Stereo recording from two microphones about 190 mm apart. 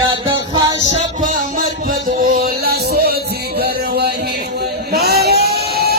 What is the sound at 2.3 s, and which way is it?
Music, 55° right (ahead or behind).